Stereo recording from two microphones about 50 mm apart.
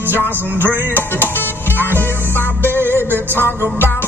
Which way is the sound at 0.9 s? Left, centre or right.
Left.